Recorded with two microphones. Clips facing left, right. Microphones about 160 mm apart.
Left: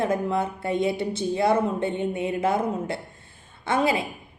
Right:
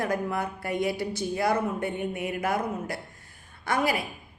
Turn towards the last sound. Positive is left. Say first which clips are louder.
# left 3 dB
turn(degrees=25)  # may be behind; listen again after turning